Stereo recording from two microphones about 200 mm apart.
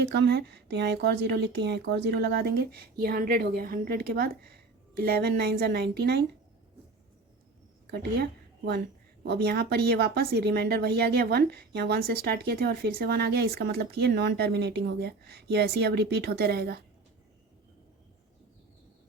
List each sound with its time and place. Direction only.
0.1 s speech: 55° right (ahead or behind)
7.9 s a woman's voice: 55° right (ahead or behind)